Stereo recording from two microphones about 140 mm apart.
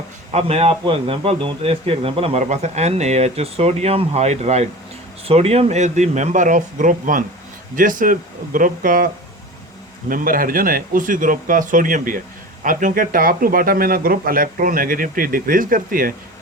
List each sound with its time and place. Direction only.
0.3 s speech: 50° right (ahead or behind)
2.4 s speech: 55° right (ahead or behind); by 9.0 s 85° right
10.1 s speech: 90° right